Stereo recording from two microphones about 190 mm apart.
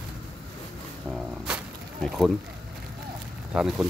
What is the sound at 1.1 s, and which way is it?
Speech, 5° right (ahead or behind).